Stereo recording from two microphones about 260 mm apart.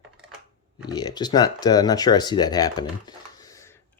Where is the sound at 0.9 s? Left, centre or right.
Centre.